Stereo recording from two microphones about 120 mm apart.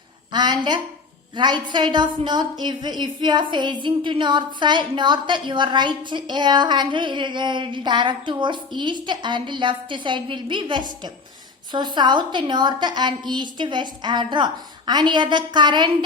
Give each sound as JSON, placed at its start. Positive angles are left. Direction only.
{"t": 0.3, "sound": "a woman's voice", "side_deg": -40}